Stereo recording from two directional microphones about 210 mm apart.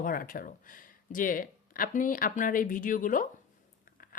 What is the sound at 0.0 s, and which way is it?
Speech, 40° left (ahead or behind).